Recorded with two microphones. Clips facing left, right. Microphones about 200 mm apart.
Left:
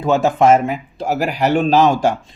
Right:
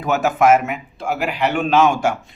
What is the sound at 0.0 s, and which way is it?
Speech, 30° left (ahead or behind).